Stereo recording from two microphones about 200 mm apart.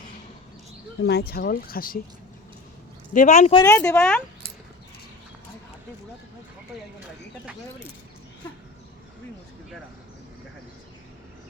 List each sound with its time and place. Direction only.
1.0 s speech: 55° left (ahead or behind)
3.1 s speech: 40° left (ahead or behind)
3.5 s speech: 15° left (ahead or behind)